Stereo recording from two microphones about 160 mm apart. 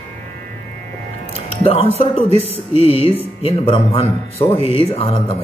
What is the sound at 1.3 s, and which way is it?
Speech, 40° left (ahead or behind).